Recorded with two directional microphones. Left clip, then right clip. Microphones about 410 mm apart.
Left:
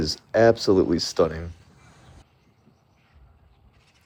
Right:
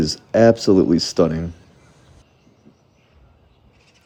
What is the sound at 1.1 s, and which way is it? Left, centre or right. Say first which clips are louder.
Speech: right 1 dB; centre.